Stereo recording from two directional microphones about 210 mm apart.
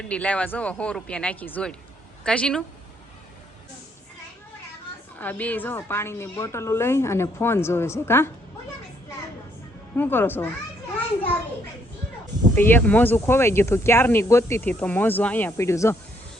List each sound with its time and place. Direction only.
0.1 s speech: 5° left (ahead or behind)
5.1 s speech: 10° left (ahead or behind)
9.9 s speech: 10° left (ahead or behind)
12.5 s speech: 10° left (ahead or behind)